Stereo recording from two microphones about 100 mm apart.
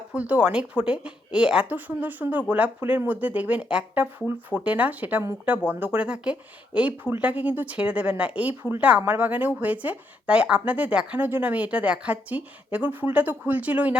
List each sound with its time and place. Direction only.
0.1 s a woman's voice: 10° right (ahead or behind)